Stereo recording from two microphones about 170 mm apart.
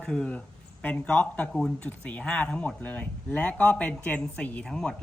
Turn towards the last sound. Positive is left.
turn(degrees=5)  # may be behind; listen again after turning